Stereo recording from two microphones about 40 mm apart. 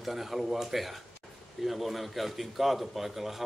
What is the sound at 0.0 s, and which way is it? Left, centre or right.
A man's voice, centre.